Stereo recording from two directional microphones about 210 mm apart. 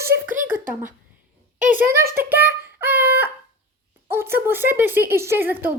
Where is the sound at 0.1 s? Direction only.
55° right (ahead or behind).